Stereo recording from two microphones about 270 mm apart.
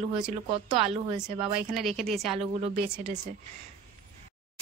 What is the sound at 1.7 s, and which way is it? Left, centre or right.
Speech, centre.